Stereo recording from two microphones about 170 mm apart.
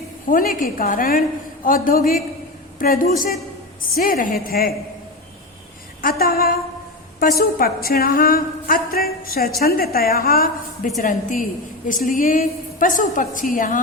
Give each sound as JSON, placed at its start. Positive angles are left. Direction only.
{"t": 0.3, "sound": "a woman's voice", "side_deg": 55}
{"t": 6.0, "sound": "a woman's voice", "side_deg": 60}